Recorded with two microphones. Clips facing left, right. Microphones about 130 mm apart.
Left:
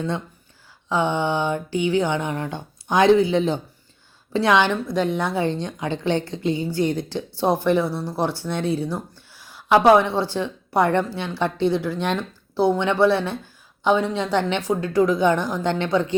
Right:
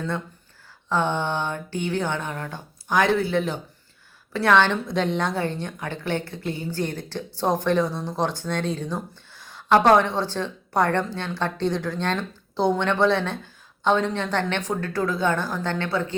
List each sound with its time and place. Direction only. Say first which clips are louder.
0.9 s a woman's voice: left 2 dB; 15° left (ahead or behind)